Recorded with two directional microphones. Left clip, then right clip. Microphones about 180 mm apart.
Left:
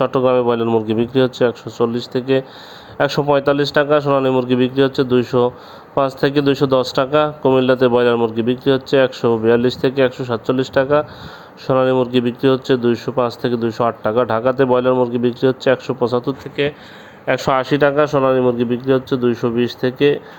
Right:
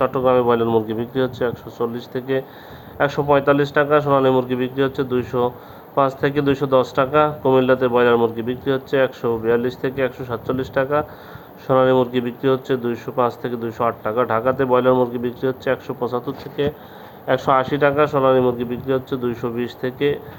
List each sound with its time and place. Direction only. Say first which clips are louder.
0.0 s speech: left 2 dB; 50° left (ahead or behind)
16.6 s speech: left 2 dB; 20° left (ahead or behind)
17.2 s speech: left 1 dB; 40° left (ahead or behind)